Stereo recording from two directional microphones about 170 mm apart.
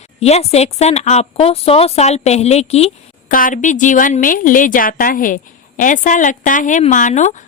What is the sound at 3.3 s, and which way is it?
A woman's voice, 55° left (ahead or behind).